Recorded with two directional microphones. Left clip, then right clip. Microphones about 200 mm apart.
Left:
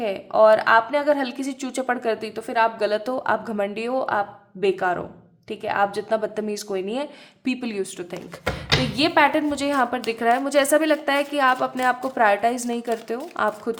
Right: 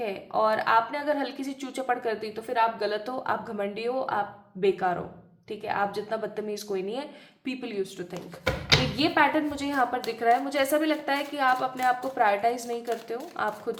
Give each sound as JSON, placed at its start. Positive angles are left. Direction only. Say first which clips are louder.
{"t": 0.0, "sound": "a woman's voice", "louder": "left 9 dB", "side_deg": 40}